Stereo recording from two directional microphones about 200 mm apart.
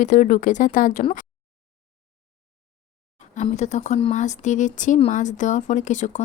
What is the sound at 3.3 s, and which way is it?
Speech, 35° left (ahead or behind).